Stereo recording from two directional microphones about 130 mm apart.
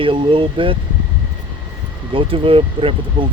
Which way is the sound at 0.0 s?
40° right (ahead or behind).